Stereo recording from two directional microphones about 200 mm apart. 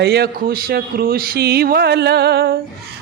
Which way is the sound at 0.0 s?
55° right (ahead or behind).